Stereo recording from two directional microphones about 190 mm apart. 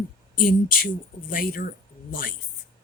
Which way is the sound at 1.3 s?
50° left (ahead or behind).